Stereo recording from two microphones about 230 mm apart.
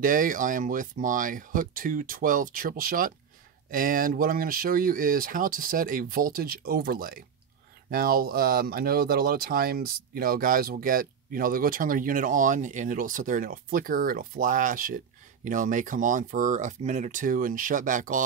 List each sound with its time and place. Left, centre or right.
0.0 s speech: right